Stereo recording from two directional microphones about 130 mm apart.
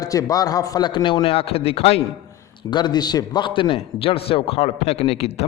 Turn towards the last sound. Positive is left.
turn(degrees=50)  # may be behind; listen again after turning